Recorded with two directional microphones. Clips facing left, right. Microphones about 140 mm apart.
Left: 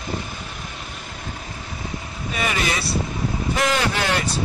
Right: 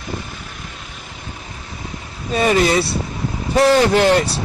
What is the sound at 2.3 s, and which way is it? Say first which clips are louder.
Speech: right 9 dB; 35° right (ahead or behind).